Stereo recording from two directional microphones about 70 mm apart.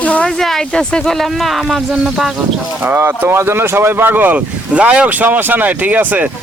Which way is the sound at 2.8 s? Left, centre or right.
Right.